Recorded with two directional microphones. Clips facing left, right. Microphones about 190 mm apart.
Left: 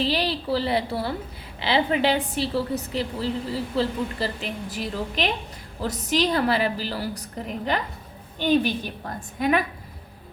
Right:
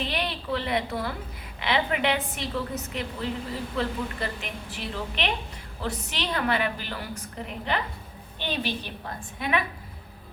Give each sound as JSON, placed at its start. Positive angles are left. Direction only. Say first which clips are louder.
{"t": 0.0, "sound": "a woman's voice", "louder": "left 6 dB", "side_deg": 30}